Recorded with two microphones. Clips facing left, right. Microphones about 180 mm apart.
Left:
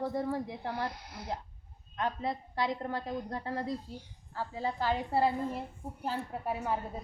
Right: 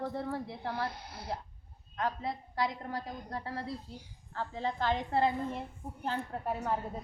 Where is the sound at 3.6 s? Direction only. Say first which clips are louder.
Left 4 dB; 10° left (ahead or behind).